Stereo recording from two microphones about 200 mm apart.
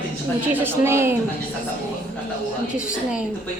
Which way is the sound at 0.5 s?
10° right (ahead or behind).